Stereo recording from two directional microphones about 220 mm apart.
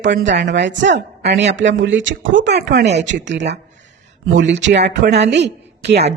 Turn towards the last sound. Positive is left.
turn(degrees=-50)  # may be behind; listen again after turning